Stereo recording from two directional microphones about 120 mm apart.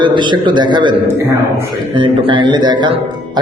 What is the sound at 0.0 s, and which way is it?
Speech, 40° right (ahead or behind).